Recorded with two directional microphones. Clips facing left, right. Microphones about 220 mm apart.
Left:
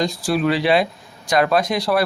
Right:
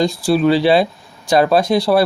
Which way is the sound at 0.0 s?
30° right (ahead or behind).